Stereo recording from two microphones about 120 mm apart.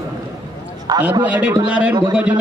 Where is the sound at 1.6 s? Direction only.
10° right (ahead or behind).